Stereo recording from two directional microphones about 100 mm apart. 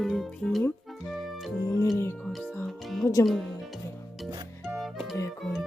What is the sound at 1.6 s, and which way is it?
Music, 30° left (ahead or behind).